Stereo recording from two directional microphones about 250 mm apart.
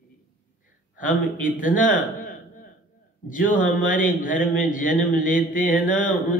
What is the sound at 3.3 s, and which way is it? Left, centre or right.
A man's voice, left.